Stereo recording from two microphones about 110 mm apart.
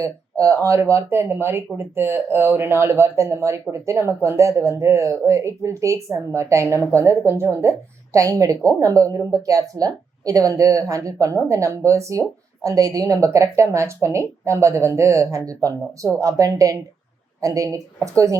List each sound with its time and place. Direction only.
0.0 s a woman's voice: 30° right (ahead or behind)